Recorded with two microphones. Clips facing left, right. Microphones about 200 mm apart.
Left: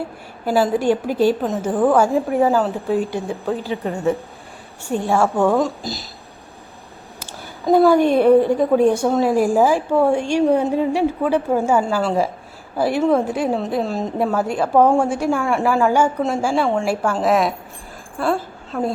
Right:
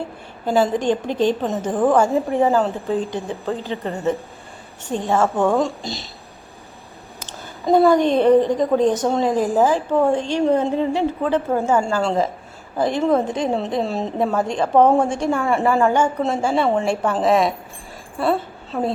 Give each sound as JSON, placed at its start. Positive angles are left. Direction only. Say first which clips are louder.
{"t": 0.4, "sound": "a woman's voice", "louder": "left 1 dB", "side_deg": 5}
{"t": 7.3, "sound": "a woman's voice", "louder": "left 1 dB", "side_deg": 5}